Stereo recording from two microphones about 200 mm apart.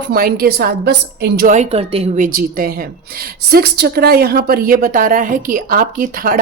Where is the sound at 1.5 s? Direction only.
30° right (ahead or behind).